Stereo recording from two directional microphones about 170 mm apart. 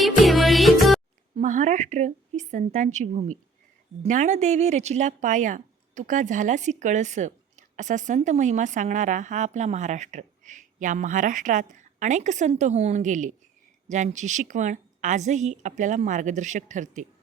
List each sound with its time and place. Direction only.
0.0 s music: centre (ahead or behind)
1.4 s speech: 45° right (ahead or behind)